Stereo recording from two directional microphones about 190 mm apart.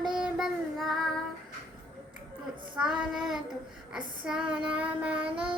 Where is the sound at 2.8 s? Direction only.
5° right (ahead or behind).